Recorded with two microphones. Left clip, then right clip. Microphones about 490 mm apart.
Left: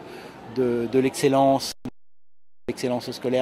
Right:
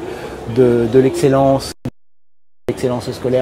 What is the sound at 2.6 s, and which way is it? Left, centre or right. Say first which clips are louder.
Speech: right 8 dB; centre.